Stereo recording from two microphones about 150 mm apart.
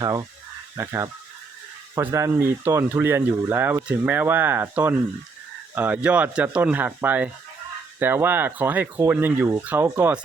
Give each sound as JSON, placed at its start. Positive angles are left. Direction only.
{"t": 0.0, "sound": "speech", "side_deg": -25}